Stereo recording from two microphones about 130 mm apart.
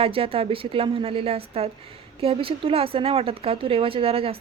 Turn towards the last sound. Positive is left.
turn(degrees=-45)  # may be behind; listen again after turning